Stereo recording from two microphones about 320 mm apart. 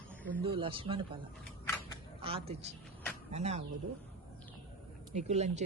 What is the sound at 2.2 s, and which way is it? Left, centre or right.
A man's voice, centre.